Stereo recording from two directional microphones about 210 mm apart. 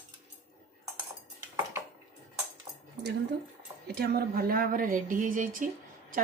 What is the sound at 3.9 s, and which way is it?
A woman's voice, 50° right (ahead or behind).